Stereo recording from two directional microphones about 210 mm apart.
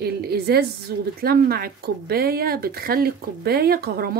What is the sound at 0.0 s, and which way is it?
Speech, 50° right (ahead or behind).